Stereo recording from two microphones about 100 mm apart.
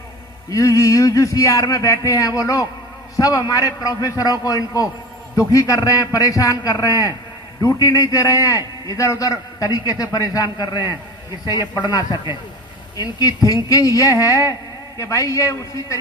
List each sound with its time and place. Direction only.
0.5 s a man's voice: 35° left (ahead or behind)